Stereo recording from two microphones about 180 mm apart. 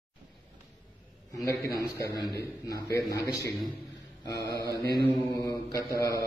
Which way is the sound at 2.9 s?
20° left (ahead or behind).